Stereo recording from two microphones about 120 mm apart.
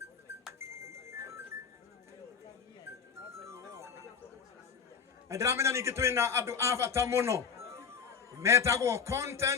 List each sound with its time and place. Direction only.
0.6 s music: 25° right (ahead or behind)
3.4 s music: 25° right (ahead or behind)
5.3 s a man's voice: 25° right (ahead or behind)